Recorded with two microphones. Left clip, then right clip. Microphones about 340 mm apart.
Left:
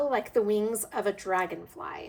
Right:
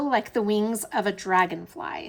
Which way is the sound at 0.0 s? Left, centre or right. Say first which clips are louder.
Right 2 dB; centre.